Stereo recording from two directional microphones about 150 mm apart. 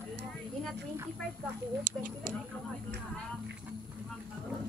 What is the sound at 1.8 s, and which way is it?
Speech, 70° right (ahead or behind).